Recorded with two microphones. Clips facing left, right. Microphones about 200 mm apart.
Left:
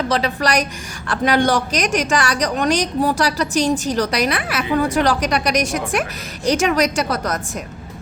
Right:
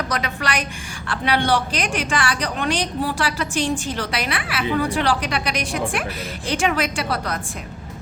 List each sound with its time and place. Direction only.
0.1 s a woman's voice: 35° left (ahead or behind)